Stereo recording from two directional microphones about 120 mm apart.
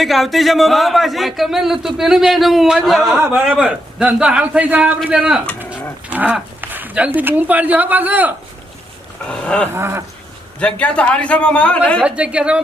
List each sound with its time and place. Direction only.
0.0 s a man's voice: centre (ahead or behind)
9.3 s a man's voice: 10° left (ahead or behind)
9.7 s dog: 20° right (ahead or behind)
10.6 s a man's voice: 10° left (ahead or behind)
12.0 s a man's voice: 10° right (ahead or behind)